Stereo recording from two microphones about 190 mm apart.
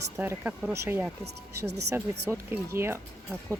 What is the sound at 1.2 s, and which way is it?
Speech, 60° right (ahead or behind).